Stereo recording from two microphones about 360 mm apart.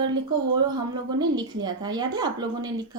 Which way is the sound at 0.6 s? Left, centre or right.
Centre.